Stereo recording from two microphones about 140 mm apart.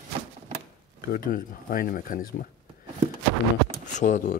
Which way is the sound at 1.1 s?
80° left.